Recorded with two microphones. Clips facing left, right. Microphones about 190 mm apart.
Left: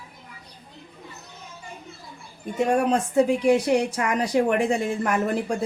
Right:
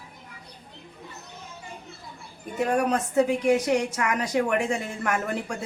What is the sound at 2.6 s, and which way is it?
Speech, 30° left (ahead or behind).